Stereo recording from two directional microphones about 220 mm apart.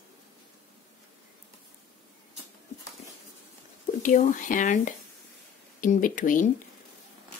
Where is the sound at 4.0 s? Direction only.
35° left (ahead or behind).